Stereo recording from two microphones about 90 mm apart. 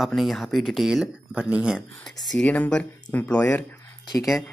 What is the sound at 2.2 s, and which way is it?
Speech, 10° left (ahead or behind).